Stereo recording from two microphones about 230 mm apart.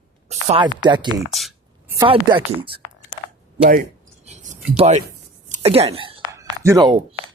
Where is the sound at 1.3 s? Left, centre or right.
Centre.